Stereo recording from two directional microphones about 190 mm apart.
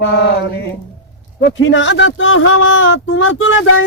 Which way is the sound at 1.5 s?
75° left (ahead or behind).